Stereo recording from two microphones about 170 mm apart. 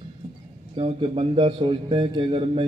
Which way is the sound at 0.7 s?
35° right (ahead or behind).